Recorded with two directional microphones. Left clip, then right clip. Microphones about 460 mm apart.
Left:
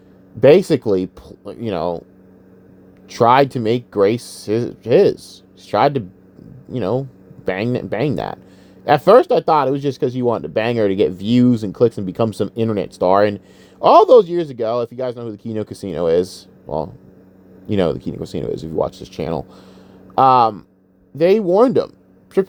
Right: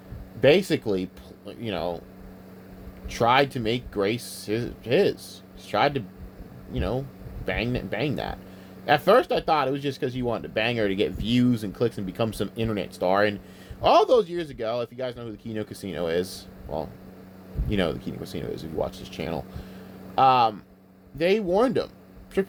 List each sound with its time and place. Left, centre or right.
0.4 s speech: centre
3.1 s speech: centre